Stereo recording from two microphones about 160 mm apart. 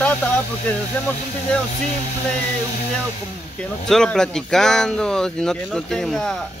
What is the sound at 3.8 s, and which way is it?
Speech, 5° left (ahead or behind).